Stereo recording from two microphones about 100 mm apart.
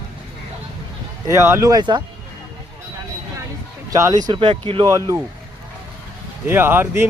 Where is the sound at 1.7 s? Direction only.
50° right (ahead or behind).